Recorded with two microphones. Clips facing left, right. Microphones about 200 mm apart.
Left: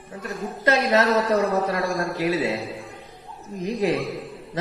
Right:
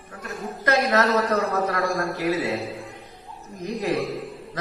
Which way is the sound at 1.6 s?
15° left (ahead or behind).